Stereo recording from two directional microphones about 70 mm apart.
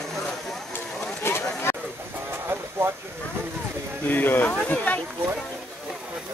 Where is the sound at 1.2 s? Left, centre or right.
Left.